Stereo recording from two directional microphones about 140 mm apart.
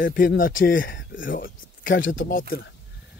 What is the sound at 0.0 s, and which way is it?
Speech, 80° left.